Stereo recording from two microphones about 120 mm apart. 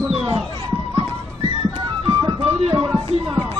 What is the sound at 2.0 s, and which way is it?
Music, 45° right (ahead or behind).